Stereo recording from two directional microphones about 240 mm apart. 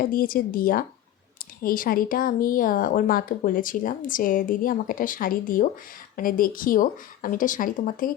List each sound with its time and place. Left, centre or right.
0.0 s speech: left